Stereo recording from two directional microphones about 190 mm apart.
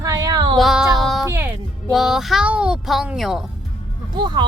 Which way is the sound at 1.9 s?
Centre (ahead or behind).